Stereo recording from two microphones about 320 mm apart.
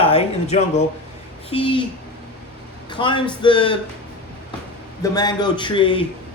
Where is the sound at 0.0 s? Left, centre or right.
Centre.